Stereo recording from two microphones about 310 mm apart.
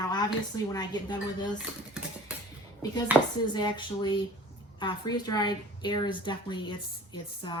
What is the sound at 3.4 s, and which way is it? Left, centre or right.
A woman's voice, centre.